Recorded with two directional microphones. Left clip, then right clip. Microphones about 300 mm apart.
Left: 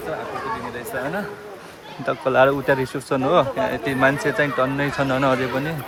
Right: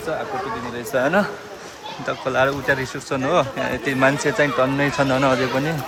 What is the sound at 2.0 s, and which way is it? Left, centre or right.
Speech, centre.